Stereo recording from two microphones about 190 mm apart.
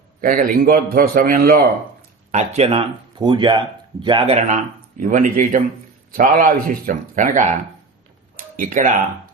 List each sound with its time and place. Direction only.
0.2 s a man's voice: 45° right (ahead or behind)